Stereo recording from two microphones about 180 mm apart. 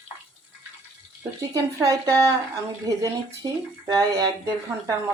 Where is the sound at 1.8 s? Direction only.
15° right (ahead or behind).